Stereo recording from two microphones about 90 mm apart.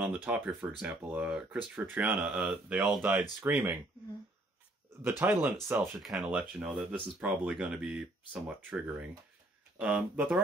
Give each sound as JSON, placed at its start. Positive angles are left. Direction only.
{"t": 0.0, "sound": "speech", "side_deg": -20}
{"t": 5.2, "sound": "speech", "side_deg": -25}
{"t": 5.9, "sound": "speech", "side_deg": 0}